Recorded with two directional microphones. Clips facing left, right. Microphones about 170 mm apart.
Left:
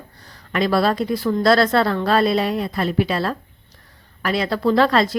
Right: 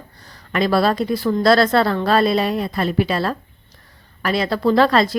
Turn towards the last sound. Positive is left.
turn(degrees=-35)  # may be behind; listen again after turning